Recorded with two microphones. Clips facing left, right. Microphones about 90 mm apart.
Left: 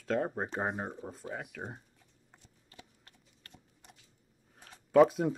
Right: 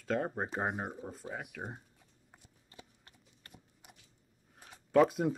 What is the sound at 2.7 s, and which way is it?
Horse, 20° right (ahead or behind).